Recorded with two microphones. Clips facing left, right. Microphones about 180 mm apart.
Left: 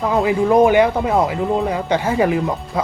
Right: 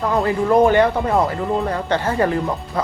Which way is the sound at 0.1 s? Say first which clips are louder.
Left 2 dB; 10° left (ahead or behind).